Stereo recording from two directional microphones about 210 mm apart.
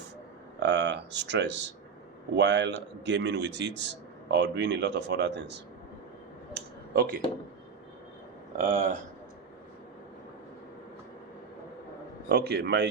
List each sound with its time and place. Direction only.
0.6 s a man's voice: 55° right (ahead or behind)
6.5 s a sound: 45° right (ahead or behind)
8.5 s speech: 40° right (ahead or behind)
12.3 s a man's voice: 50° right (ahead or behind)